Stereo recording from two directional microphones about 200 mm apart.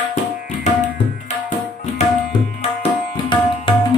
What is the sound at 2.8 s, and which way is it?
Tabla, 25° left (ahead or behind).